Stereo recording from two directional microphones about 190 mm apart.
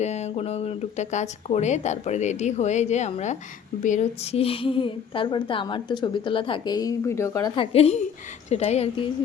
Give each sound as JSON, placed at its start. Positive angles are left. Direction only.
{"t": 0.0, "sound": "a woman's voice", "side_deg": 35}